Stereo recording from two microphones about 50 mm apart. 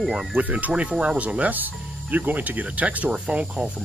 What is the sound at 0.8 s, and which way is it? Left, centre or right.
Speech, centre.